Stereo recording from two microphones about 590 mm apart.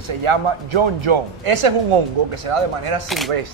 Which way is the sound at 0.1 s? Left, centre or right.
Right.